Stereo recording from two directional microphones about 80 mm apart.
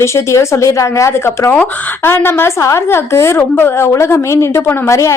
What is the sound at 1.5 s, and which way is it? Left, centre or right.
A woman's voice, left.